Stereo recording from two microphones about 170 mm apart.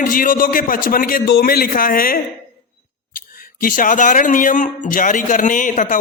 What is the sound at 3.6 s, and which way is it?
A man's voice, 50° left (ahead or behind).